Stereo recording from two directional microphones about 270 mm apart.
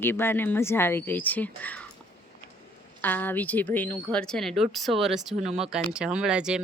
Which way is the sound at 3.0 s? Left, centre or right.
Centre.